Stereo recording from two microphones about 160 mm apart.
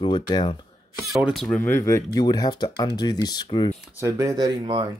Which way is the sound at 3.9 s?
20° right (ahead or behind).